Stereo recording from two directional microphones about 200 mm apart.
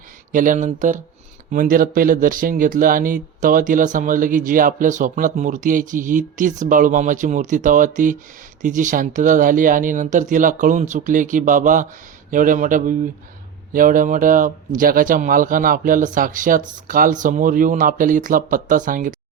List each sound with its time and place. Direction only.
0.3 s speech: 40° right (ahead or behind)